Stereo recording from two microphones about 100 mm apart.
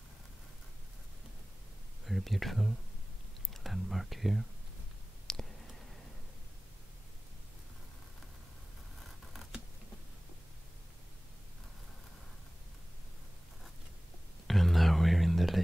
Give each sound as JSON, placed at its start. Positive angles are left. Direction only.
{"t": 2.0, "sound": "speech", "side_deg": 0}
{"t": 5.2, "sound": "a sound", "side_deg": 5}
{"t": 9.0, "sound": "scissors", "side_deg": 0}
{"t": 14.5, "sound": "whispering", "side_deg": 0}